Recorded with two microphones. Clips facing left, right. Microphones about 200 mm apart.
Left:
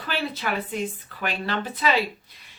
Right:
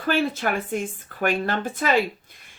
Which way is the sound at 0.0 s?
50° right (ahead or behind).